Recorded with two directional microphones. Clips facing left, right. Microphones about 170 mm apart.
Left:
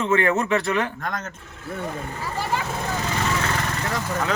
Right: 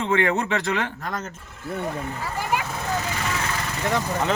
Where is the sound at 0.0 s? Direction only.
20° right (ahead or behind).